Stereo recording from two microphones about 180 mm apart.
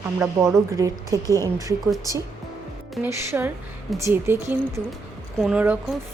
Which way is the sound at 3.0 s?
10° right (ahead or behind).